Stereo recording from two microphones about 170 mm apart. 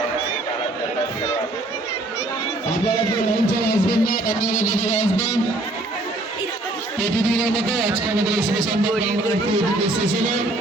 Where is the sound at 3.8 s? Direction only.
60° left (ahead or behind).